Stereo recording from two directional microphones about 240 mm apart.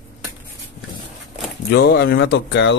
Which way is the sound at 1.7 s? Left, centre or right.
Left.